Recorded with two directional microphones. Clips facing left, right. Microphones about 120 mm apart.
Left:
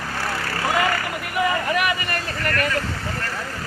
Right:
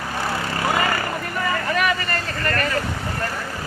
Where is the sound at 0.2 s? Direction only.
20° right (ahead or behind).